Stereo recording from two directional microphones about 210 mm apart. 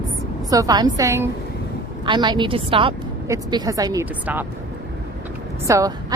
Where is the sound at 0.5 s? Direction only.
15° right (ahead or behind).